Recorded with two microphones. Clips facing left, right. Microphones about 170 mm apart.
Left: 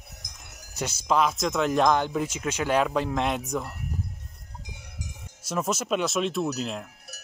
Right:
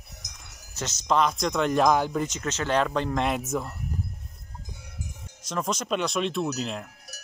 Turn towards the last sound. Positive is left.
turn(degrees=0)  # may be behind; listen again after turning